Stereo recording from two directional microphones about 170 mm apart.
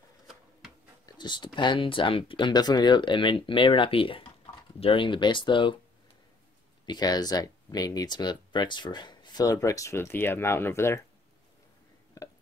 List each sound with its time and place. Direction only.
1.0 s speech: 25° left (ahead or behind)
6.9 s speech: 25° left (ahead or behind)
12.2 s a sound: 20° left (ahead or behind)